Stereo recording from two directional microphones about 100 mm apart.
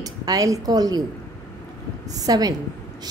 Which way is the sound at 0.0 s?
40° right (ahead or behind).